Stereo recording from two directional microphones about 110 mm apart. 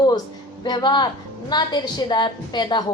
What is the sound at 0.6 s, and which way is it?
A woman's voice, 40° left (ahead or behind).